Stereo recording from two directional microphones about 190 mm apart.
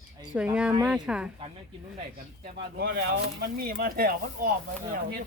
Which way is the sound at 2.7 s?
60° right (ahead or behind).